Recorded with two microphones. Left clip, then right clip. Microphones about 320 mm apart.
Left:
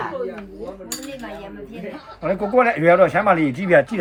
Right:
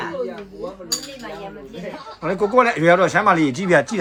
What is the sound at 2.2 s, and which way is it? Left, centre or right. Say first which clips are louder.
Speech: right 1 dB; centre.